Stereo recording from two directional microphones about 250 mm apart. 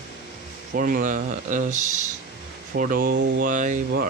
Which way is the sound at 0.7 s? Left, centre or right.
Right.